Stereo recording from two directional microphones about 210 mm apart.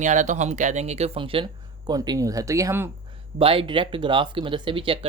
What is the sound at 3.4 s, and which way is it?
Speech, 25° right (ahead or behind).